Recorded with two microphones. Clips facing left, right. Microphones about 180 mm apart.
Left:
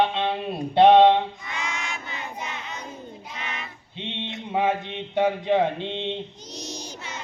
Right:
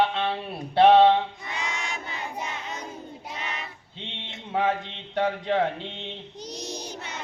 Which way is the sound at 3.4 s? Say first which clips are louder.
Left 1 dB; 40° right (ahead or behind).